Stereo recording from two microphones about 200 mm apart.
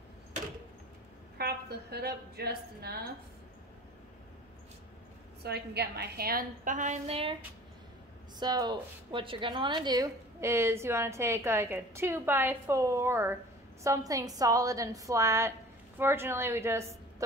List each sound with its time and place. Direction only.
1.4 s a woman's voice: 55° right (ahead or behind)
5.4 s a woman's voice: 55° right (ahead or behind); by 7.3 s 30° right (ahead or behind)
8.4 s a woman's voice: 20° right (ahead or behind)